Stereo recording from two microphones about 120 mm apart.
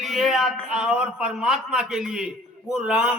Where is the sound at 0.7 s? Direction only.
5° right (ahead or behind).